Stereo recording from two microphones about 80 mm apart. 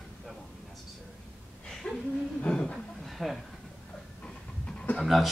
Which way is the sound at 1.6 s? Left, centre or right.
Centre.